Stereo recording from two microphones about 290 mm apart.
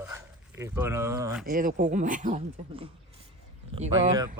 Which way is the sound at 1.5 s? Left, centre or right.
Right.